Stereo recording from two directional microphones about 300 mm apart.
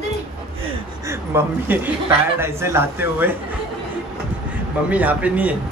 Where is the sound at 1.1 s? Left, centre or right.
Centre.